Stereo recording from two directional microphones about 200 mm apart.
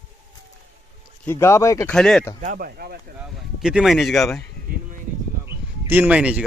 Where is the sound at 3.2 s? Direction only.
5° right (ahead or behind).